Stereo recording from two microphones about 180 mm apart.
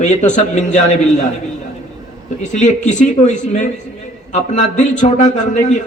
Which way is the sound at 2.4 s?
45° left (ahead or behind).